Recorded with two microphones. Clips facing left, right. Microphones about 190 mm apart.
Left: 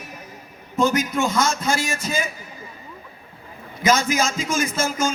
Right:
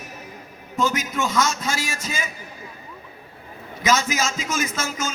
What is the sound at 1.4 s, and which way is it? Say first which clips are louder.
Speech: left 3 dB; 50° left (ahead or behind).